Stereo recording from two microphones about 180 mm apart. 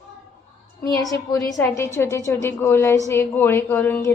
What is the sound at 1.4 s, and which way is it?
A woman's voice, 20° left (ahead or behind).